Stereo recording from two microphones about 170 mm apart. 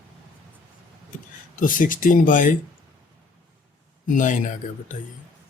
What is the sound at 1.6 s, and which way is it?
Speech, 50° left (ahead or behind).